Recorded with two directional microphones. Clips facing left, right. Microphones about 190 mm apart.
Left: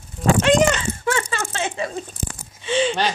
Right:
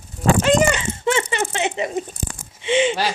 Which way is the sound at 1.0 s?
20° right (ahead or behind).